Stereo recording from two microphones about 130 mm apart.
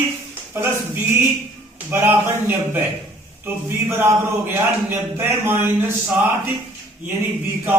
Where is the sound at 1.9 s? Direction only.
15° right (ahead or behind).